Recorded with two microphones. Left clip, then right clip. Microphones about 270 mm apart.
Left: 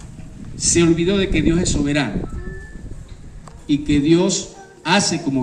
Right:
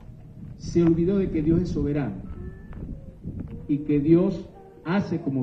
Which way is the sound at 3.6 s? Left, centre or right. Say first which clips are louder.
Left 6 dB; left.